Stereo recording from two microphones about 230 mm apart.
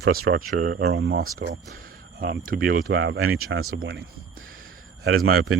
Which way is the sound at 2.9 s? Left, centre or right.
Right.